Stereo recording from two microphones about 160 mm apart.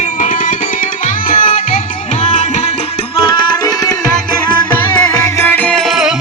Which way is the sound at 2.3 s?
45° left (ahead or behind).